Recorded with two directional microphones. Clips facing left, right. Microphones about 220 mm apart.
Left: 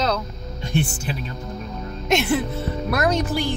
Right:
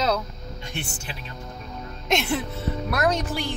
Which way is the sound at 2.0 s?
5° left (ahead or behind).